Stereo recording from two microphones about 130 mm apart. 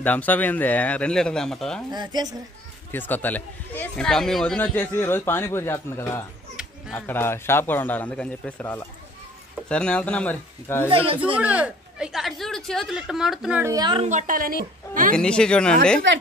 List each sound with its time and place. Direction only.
0.0 s a man's voice: 10° left (ahead or behind)
1.9 s speech: 30° right (ahead or behind)
2.9 s a man's voice: 15° left (ahead or behind)
4.7 s a man's voice: 15° left (ahead or behind)
10.9 s speech: 45° right (ahead or behind)
11.3 s speech: 10° right (ahead or behind)
13.6 s a woman's voice: 25° right (ahead or behind)
14.0 s a woman's voice: 80° right
15.1 s a man's voice: 5° left (ahead or behind)